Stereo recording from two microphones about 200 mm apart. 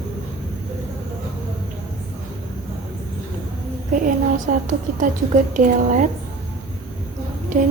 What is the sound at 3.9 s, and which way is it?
A woman's voice, 40° right (ahead or behind).